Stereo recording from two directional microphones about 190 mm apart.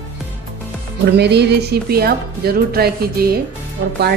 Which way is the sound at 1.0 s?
60° right (ahead or behind).